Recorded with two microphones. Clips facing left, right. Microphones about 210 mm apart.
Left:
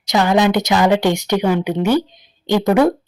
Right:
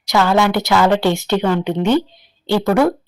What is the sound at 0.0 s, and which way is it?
Speech, 20° left (ahead or behind).